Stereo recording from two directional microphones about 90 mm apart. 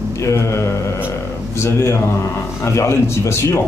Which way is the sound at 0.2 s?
35° left (ahead or behind).